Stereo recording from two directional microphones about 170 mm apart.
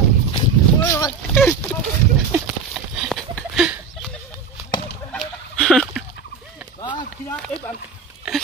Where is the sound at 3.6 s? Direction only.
Centre (ahead or behind).